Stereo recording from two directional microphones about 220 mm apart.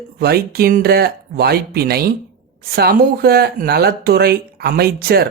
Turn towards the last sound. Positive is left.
turn(degrees=-45)  # may be behind; listen again after turning